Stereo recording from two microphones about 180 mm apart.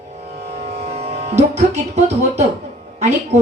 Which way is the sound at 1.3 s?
40° right (ahead or behind).